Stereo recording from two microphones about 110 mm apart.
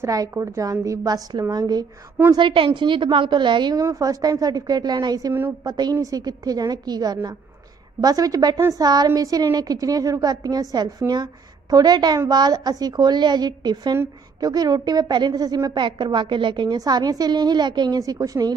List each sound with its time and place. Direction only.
0.0 s a woman's voice: 30° right (ahead or behind)
2.3 s a woman's voice: 50° right (ahead or behind)
3.8 s a woman's voice: 30° right (ahead or behind)